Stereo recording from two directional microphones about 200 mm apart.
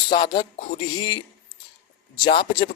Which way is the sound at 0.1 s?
25° left (ahead or behind).